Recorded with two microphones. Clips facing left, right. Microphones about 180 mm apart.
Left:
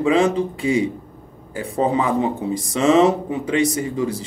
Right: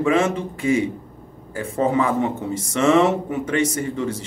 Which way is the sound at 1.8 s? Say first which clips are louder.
Left 1 dB; 20° left (ahead or behind).